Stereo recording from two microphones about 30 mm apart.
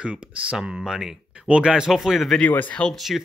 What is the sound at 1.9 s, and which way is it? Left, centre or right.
Speech, centre.